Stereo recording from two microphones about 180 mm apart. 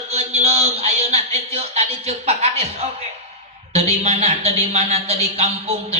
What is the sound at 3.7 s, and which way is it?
A man's voice, 35° right (ahead or behind).